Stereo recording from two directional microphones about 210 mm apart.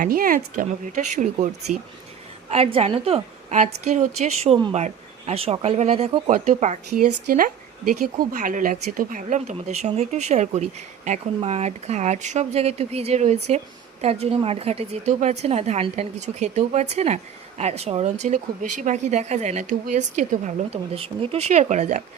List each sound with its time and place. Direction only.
0.0 s a woman's voice: 40° right (ahead or behind)